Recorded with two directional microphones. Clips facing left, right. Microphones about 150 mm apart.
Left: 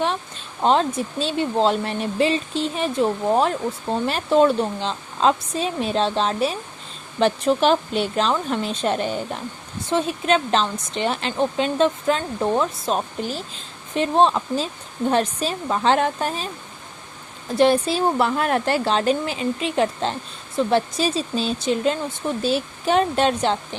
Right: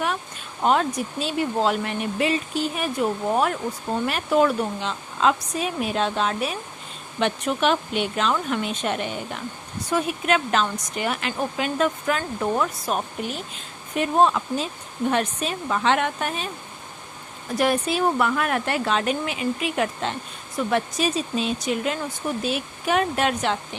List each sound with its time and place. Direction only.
0.0 s speech: 25° left (ahead or behind)
17.5 s speech: 30° left (ahead or behind)